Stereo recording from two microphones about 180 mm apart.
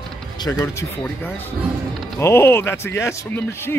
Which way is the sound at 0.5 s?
15° left (ahead or behind).